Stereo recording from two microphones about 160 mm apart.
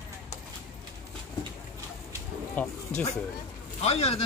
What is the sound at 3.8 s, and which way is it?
Speech, 40° left (ahead or behind).